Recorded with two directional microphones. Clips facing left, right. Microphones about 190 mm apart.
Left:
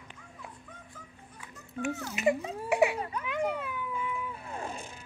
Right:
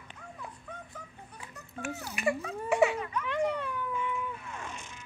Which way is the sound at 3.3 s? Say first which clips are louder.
Right 2 dB; 5° left (ahead or behind).